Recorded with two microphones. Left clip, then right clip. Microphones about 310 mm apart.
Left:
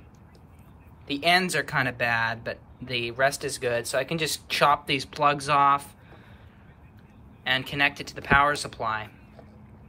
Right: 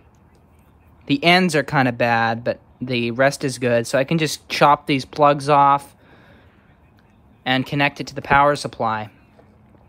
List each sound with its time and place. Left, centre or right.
1.0 s speech: right
7.4 s speech: centre